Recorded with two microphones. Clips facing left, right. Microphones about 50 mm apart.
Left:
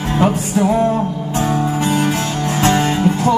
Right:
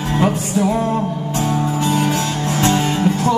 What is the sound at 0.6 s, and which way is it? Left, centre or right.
Music, left.